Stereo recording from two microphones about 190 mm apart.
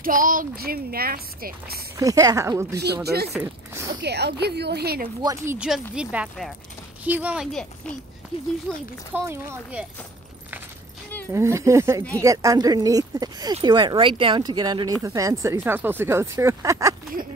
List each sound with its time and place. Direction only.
0.0 s speech: 45° right (ahead or behind)
2.0 s speech: 20° right (ahead or behind)
2.8 s a woman's voice: 60° right (ahead or behind)
5.2 s speech: 15° right (ahead or behind)
8.7 s speech: centre (ahead or behind)
9.1 s speech: 15° right (ahead or behind)
11.3 s speech: 15° right (ahead or behind)